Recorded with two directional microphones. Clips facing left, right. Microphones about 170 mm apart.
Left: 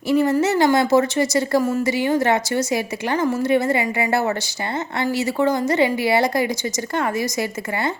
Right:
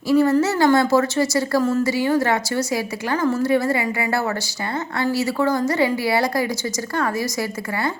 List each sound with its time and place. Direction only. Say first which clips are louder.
0.1 s a woman's voice: right 1 dB; 20° left (ahead or behind)